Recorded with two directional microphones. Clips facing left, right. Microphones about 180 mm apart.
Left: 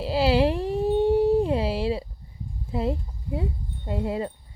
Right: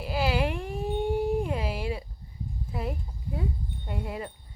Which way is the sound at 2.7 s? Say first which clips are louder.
Left 8 dB; 25° left (ahead or behind).